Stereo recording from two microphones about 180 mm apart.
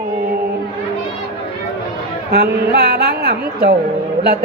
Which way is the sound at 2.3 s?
65° right (ahead or behind).